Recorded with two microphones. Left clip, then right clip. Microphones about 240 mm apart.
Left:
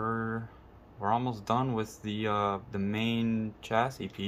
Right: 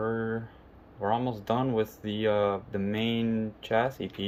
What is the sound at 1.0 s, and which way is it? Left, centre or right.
Speech, left.